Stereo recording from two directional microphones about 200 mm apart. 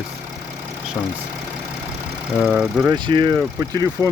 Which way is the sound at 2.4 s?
Centre (ahead or behind).